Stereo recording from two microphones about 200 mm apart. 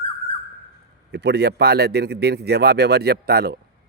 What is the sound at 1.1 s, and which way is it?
Speech, 55° right (ahead or behind).